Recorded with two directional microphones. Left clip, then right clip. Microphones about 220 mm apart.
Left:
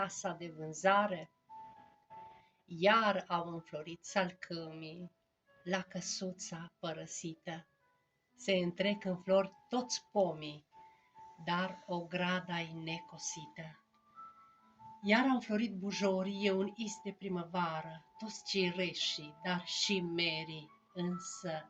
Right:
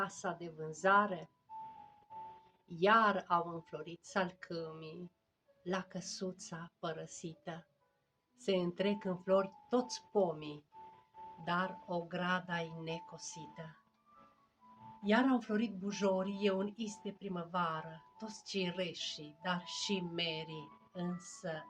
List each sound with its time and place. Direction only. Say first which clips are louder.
0.0 s speech: left 1 dB; 25° right (ahead or behind)
2.6 s speech: even; 25° right (ahead or behind)
15.1 s speech: left 1 dB; 25° right (ahead or behind)